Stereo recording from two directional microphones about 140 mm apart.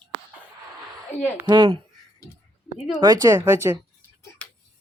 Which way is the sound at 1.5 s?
35° right (ahead or behind).